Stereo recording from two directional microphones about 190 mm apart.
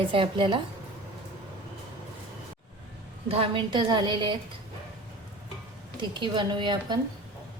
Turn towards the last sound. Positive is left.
turn(degrees=-25)  # may be behind; listen again after turning